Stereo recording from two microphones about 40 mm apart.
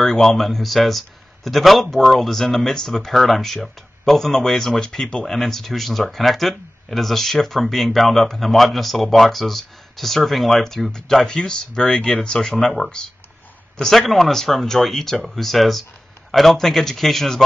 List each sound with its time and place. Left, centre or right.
0.0 s speech: centre
13.7 s speech: centre